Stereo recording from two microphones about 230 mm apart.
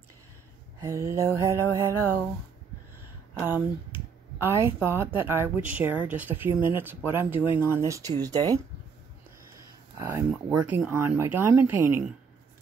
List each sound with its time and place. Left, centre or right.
0.7 s speech: centre
3.4 s speech: centre
9.9 s speech: centre